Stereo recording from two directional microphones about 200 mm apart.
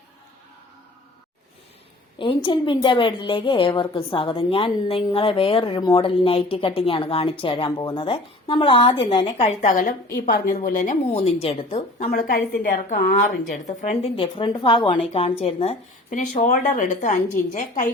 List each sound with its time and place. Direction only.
2.1 s a woman's voice: 25° left (ahead or behind)
9.6 s a woman's voice: 40° left (ahead or behind)